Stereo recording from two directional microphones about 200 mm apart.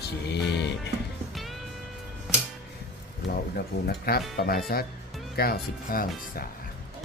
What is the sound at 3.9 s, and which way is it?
Speech, 50° left (ahead or behind).